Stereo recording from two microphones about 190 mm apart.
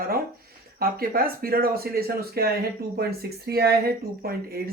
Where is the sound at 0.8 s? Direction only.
50° right (ahead or behind).